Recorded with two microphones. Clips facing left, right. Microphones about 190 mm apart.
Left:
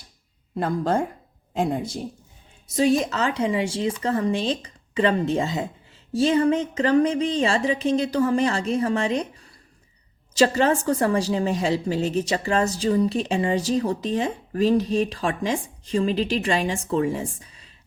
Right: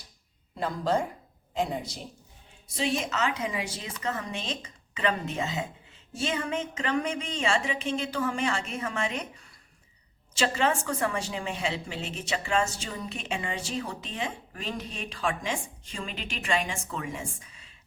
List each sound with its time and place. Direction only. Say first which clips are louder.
0.5 s a woman's voice: left 5 dB; 55° left (ahead or behind)
2.7 s a woman's voice: left 9 dB; 40° left (ahead or behind)